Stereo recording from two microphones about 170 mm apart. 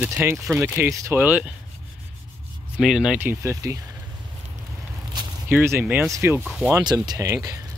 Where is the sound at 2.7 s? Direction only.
5° right (ahead or behind).